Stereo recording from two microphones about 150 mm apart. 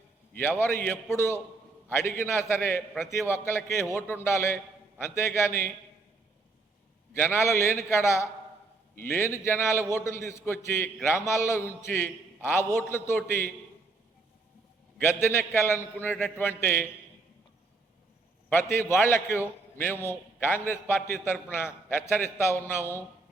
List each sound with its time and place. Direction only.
0.6 s a man's voice: 15° left (ahead or behind)
7.1 s a man's voice: 15° left (ahead or behind)
14.9 s a man's voice: 15° left (ahead or behind)
18.5 s a man's voice: 15° left (ahead or behind)